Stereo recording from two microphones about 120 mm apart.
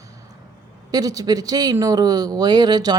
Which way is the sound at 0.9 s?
30° right (ahead or behind).